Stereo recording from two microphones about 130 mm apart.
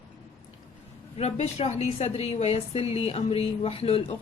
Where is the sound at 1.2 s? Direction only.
55° left (ahead or behind).